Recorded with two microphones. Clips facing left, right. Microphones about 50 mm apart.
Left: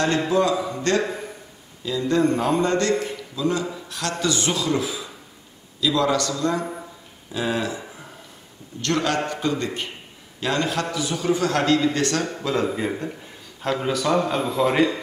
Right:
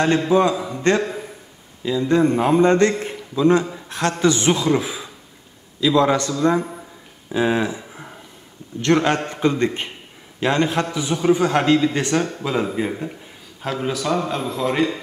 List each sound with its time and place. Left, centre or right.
0.3 s a man's voice: right
3.7 s a sound: right
4.2 s a man's voice: right
12.6 s a man's voice: centre